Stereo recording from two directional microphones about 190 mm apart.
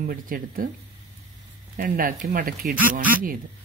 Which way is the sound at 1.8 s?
50° right (ahead or behind).